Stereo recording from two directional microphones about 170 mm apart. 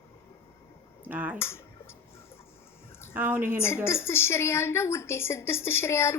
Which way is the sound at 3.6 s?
15° left (ahead or behind).